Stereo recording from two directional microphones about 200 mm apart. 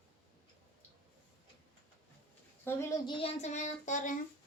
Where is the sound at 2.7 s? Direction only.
15° left (ahead or behind); by 4.1 s 40° left (ahead or behind).